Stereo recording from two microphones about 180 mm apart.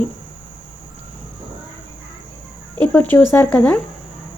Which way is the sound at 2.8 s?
10° left (ahead or behind).